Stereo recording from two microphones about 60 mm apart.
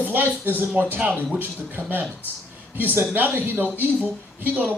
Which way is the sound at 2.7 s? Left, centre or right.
Right.